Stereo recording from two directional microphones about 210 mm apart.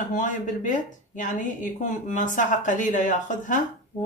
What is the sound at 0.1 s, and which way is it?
A woman's voice, 35° left (ahead or behind).